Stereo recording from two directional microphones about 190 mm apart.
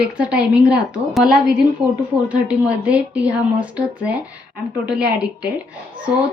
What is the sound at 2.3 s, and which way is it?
Speech, 5° right (ahead or behind).